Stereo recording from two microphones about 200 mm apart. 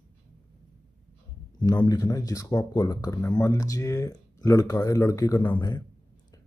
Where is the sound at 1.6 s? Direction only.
20° left (ahead or behind).